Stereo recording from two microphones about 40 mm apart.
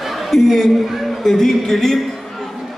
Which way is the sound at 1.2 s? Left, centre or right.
Centre.